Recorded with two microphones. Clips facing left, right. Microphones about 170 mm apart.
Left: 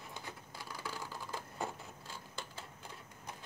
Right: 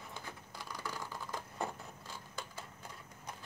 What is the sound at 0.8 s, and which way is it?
Typing, 5° left (ahead or behind).